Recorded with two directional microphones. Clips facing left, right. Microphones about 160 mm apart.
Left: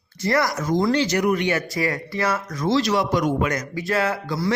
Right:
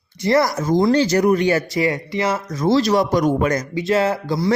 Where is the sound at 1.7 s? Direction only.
25° right (ahead or behind).